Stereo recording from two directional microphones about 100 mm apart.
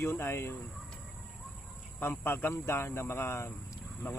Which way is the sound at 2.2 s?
20° left (ahead or behind).